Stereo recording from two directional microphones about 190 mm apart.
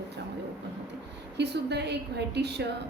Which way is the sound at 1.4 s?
60° right (ahead or behind).